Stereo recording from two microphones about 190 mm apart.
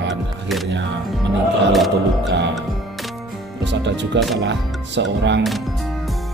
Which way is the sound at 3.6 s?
65° right (ahead or behind).